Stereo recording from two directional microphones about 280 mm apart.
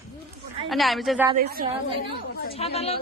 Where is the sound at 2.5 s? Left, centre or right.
Left.